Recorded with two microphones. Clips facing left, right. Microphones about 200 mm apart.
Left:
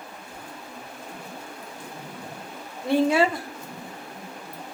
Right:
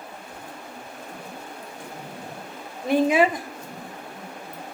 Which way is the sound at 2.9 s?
15° right (ahead or behind).